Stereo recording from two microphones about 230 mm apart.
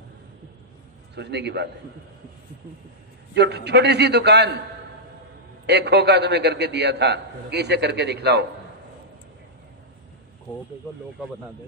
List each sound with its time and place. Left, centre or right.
1.1 s a man's voice: right
3.3 s a man's voice: right
5.7 s a man's voice: right